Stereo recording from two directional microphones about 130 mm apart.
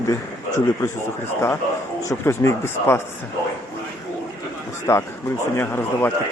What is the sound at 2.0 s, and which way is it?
Speech, 20° left (ahead or behind).